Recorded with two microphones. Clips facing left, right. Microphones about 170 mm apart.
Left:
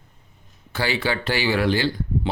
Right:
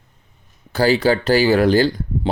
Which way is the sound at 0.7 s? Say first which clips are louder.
Right 9 dB; 40° right (ahead or behind).